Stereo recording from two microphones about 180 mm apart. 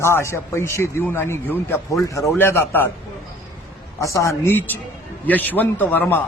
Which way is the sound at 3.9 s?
15° left (ahead or behind).